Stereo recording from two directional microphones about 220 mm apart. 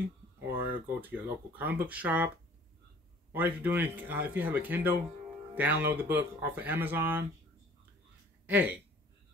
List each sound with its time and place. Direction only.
0.5 s speech: 10° right (ahead or behind)
8.5 s speech: 10° right (ahead or behind)